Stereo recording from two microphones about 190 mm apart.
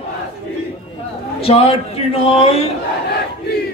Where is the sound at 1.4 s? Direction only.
30° left (ahead or behind).